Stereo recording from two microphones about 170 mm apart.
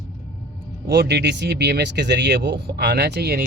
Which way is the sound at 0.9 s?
75° right (ahead or behind).